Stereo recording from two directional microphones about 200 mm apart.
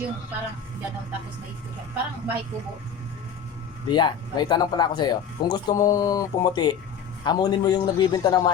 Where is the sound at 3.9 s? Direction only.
20° left (ahead or behind).